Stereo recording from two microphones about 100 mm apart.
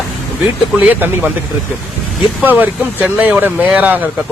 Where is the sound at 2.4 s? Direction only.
15° right (ahead or behind).